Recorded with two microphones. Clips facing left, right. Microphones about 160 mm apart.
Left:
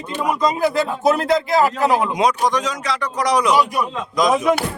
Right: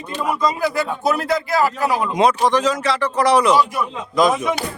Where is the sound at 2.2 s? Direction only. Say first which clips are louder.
Right 2 dB; centre (ahead or behind).